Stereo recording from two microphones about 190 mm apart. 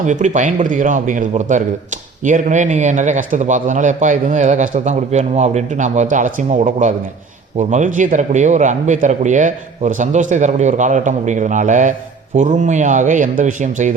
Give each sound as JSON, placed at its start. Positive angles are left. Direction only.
{"t": 0.0, "sound": "a man's voice", "side_deg": -40}